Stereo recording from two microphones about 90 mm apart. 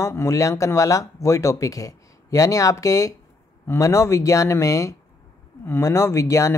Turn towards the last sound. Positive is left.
turn(degrees=35)  # may be behind; listen again after turning